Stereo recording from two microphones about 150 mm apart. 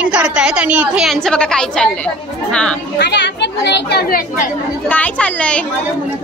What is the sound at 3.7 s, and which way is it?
Speech, 90° left.